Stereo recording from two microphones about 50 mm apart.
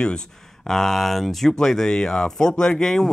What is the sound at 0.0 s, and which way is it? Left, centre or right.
Speech, centre.